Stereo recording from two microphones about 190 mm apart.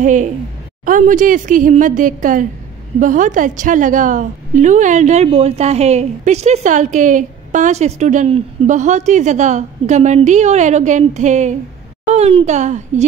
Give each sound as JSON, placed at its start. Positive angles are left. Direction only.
{"t": 0.0, "sound": "a woman's voice", "side_deg": -40}